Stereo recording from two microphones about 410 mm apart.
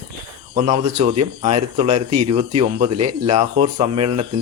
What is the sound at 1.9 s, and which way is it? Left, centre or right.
Speech, right.